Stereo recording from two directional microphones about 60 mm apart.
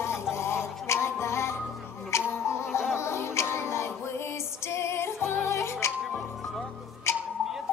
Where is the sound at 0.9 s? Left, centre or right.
Left.